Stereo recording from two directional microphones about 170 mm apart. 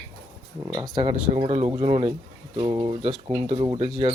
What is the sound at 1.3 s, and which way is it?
Speech, 35° right (ahead or behind).